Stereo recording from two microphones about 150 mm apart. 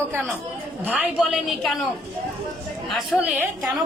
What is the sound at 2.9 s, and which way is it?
Speech, centre (ahead or behind).